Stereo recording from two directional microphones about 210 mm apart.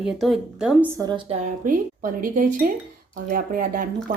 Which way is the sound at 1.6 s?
40° right (ahead or behind).